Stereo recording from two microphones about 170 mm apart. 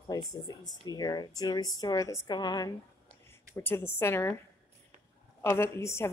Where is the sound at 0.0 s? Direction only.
20° left (ahead or behind).